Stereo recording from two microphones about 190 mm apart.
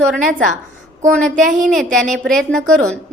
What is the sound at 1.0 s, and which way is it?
Speech, 40° right (ahead or behind).